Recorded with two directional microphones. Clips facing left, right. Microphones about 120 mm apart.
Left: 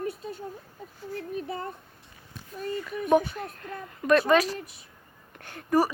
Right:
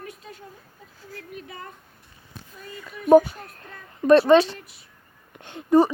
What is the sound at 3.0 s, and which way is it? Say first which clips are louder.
Speech: right 8 dB; 40° right (ahead or behind).